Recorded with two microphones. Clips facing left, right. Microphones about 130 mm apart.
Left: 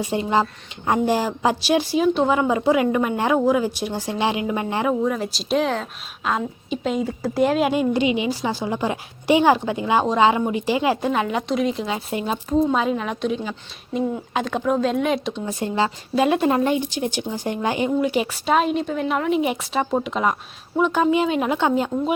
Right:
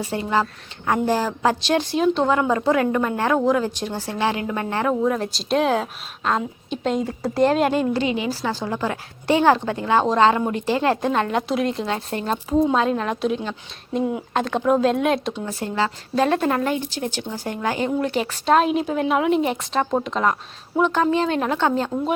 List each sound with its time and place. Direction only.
0.0 s a woman's voice: 20° left (ahead or behind)
5.0 s a woman's voice: centre (ahead or behind)
12.5 s speech: 5° right (ahead or behind)
12.7 s speech: 5° left (ahead or behind)
15.4 s a woman's voice: 20° left (ahead or behind); by 19.4 s centre (ahead or behind)
19.4 s a woman's voice: 10° left (ahead or behind)